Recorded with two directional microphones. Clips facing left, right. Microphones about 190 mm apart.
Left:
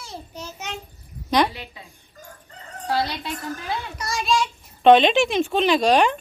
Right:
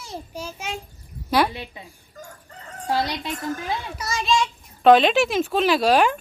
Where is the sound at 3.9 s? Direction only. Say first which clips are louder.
Even; centre (ahead or behind).